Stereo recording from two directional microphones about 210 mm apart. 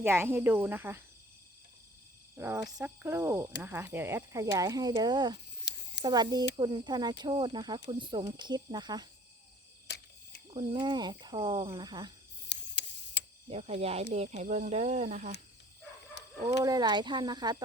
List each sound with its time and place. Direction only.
0.0 s speech: 10° right (ahead or behind)
2.3 s speech: 10° right (ahead or behind)
10.5 s speech: 20° right (ahead or behind)
12.5 s tick-tock: 55° left (ahead or behind)
13.5 s speech: 30° right (ahead or behind)
16.6 s speech: 20° right (ahead or behind)